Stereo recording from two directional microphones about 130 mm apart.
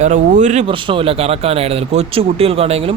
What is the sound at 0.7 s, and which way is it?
Speech, 40° right (ahead or behind).